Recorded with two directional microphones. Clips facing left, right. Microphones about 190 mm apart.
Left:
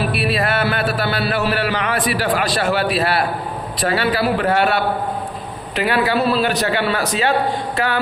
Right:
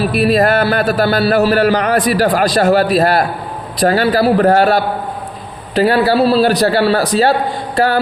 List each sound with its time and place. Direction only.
0.1 s a man's voice: 40° right (ahead or behind)